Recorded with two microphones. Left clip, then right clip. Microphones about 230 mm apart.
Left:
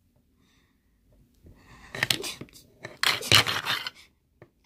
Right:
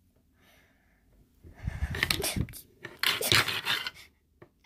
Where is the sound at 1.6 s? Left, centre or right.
Centre.